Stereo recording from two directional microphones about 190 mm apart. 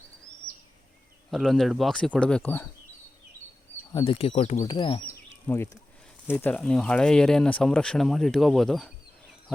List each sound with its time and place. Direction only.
1.3 s speech: centre (ahead or behind)
3.9 s speech: 30° left (ahead or behind)
4.7 s speech: 25° left (ahead or behind)
5.5 s speech: 10° left (ahead or behind)